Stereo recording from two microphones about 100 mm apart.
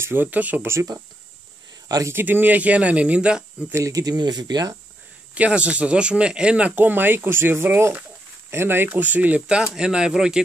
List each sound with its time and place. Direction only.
0.0 s speech: 20° right (ahead or behind)
1.9 s speech: 35° right (ahead or behind)
2.1 s speech: 20° right (ahead or behind)
3.7 s speech: 35° right (ahead or behind)
5.3 s speech: 15° right (ahead or behind)